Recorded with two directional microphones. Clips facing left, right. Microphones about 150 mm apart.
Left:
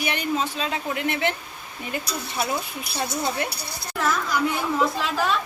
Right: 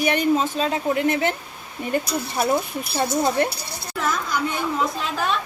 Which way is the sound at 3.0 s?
40° right (ahead or behind).